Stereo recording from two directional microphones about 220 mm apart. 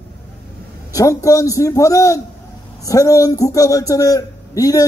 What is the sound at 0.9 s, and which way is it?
A man's voice, 15° left (ahead or behind).